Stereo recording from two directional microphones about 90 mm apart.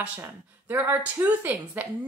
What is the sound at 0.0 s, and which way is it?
A woman's voice, 20° right (ahead or behind).